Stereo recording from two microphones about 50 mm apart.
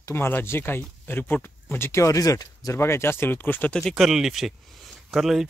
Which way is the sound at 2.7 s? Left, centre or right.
Left.